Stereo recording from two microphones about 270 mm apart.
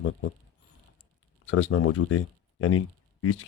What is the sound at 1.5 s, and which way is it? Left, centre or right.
Speech, left.